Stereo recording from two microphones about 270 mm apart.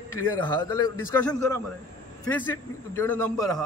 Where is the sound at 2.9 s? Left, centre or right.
Centre.